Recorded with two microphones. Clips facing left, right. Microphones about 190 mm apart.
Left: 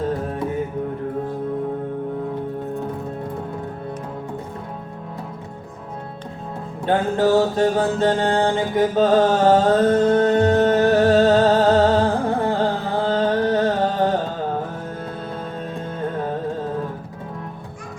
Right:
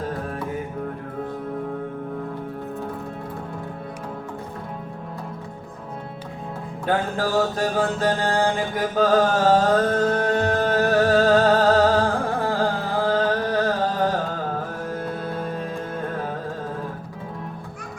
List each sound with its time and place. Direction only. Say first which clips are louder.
6.8 s mantra: left 5 dB; 25° left (ahead or behind)
12.5 s music: left 2 dB; 25° left (ahead or behind)